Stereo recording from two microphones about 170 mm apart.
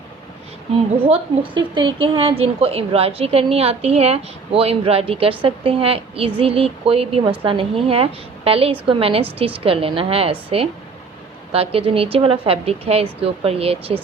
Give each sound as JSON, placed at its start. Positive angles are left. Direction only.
{"t": 0.9, "sound": "a woman's voice", "side_deg": -35}
{"t": 11.5, "sound": "a woman's voice", "side_deg": -35}